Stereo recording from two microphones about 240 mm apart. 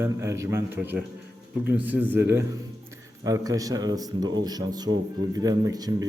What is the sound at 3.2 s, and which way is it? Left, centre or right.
A man's voice, centre.